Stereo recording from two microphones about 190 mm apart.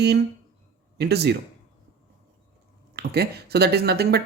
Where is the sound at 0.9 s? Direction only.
60° right (ahead or behind).